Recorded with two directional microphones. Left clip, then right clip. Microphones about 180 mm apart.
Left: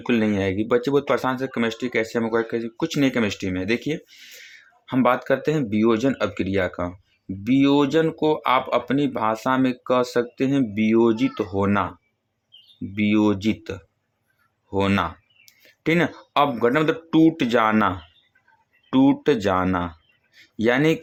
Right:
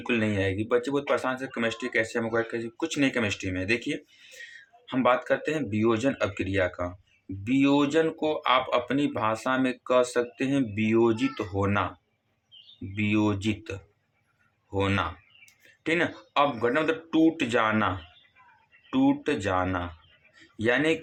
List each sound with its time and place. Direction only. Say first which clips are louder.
0.1 s speech: left 5 dB; 35° left (ahead or behind)
12.9 s speech: left 6 dB; 35° left (ahead or behind)
19.4 s speech: left 6 dB; 45° left (ahead or behind)